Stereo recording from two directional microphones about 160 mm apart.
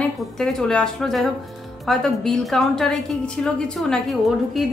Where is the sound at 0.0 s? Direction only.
5° left (ahead or behind).